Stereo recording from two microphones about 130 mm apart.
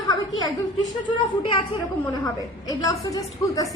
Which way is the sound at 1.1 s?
40° left (ahead or behind).